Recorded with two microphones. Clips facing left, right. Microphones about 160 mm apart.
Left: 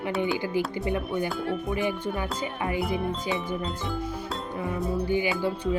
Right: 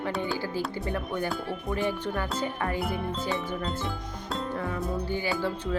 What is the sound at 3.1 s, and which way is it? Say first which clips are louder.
Music: left 1 dB; centre (ahead or behind).